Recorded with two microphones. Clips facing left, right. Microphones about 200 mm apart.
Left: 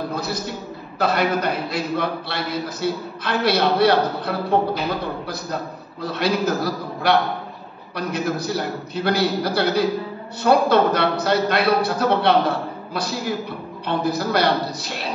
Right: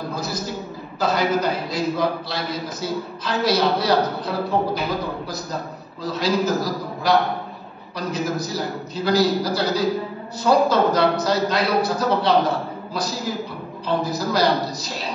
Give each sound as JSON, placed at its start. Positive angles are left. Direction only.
{"t": 0.1, "sound": "a man's voice", "side_deg": 60}
{"t": 6.0, "sound": "a man's voice", "side_deg": 60}